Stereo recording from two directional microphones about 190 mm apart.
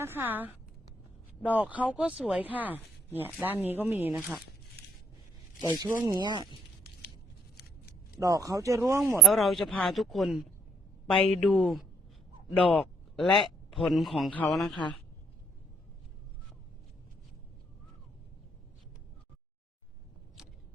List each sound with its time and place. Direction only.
0.0 s speech: 10° right (ahead or behind)
5.5 s speech: 25° right (ahead or behind)
7.5 s a sound: 55° left (ahead or behind)
8.2 s speech: 15° right (ahead or behind)
9.2 s speech: centre (ahead or behind)